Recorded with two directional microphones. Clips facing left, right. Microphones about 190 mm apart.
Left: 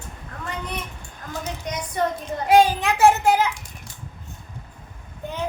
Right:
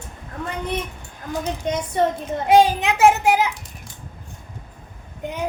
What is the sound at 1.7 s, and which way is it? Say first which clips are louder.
A child's voice: right 4 dB; 25° right (ahead or behind).